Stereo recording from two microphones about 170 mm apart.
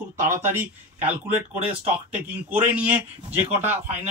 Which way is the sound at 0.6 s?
10° right (ahead or behind).